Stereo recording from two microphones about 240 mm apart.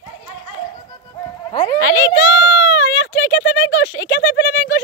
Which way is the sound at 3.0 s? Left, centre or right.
Left.